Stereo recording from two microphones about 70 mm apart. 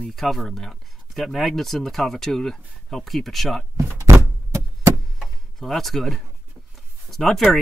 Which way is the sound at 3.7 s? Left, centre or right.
Right.